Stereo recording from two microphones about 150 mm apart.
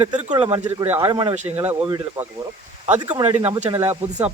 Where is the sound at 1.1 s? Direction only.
30° right (ahead or behind).